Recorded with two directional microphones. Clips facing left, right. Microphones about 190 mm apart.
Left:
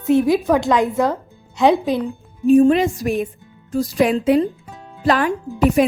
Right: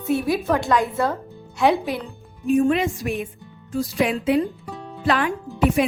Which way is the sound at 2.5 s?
35° left (ahead or behind).